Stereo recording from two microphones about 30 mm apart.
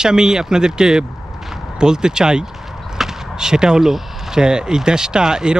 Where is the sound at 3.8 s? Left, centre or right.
Centre.